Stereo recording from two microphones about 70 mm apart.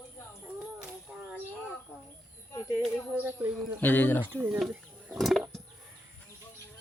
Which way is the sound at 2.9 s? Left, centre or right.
Right.